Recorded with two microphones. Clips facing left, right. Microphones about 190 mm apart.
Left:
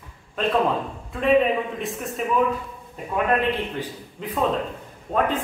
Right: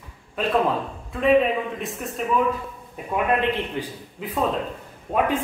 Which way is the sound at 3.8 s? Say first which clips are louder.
Right 1 dB; 15° right (ahead or behind).